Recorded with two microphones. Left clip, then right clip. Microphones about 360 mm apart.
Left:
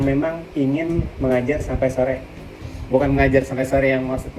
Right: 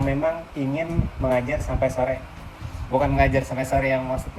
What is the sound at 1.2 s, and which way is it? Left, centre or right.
Speech, right.